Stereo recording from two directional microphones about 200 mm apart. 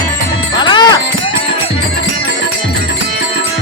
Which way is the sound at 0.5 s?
20° left (ahead or behind).